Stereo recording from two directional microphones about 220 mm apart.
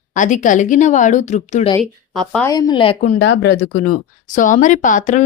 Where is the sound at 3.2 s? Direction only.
50° left (ahead or behind).